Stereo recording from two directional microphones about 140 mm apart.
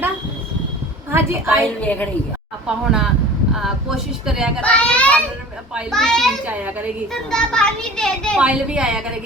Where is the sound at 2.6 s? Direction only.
5° right (ahead or behind).